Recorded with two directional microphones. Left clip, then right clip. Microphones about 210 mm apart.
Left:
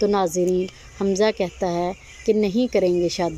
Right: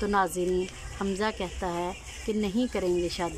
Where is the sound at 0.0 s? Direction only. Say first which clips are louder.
Left 6 dB; 15° left (ahead or behind).